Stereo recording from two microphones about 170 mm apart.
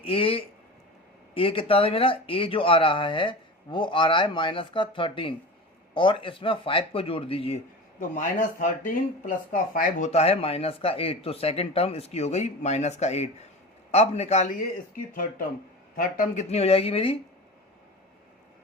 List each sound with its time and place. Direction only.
0.0 s speech: 35° left (ahead or behind)
7.9 s speech: 50° left (ahead or behind)
14.9 s speech: 55° left (ahead or behind); by 17.2 s 35° left (ahead or behind)